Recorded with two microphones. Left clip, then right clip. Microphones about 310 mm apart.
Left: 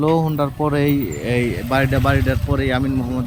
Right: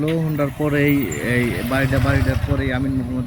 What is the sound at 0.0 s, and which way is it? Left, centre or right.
Speech, centre.